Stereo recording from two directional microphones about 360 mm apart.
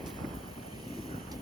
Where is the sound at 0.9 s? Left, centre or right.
Centre.